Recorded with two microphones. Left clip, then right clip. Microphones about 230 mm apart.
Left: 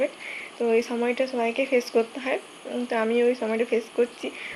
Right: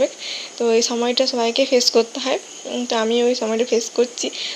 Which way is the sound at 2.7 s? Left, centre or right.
Right.